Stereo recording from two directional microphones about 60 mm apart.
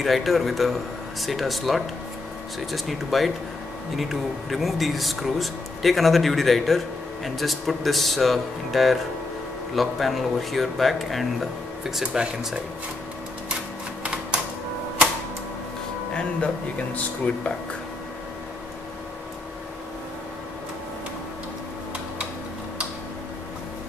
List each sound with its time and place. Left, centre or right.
0.0 s speech: centre
14.0 s typewriter: centre
16.1 s speech: centre